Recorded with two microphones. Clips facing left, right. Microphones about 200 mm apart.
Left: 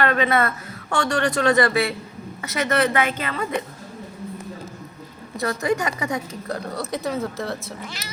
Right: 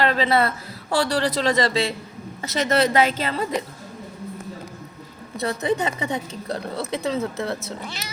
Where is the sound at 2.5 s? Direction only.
30° right (ahead or behind).